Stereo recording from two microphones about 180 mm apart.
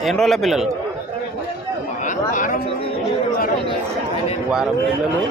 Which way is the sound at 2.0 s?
45° left (ahead or behind).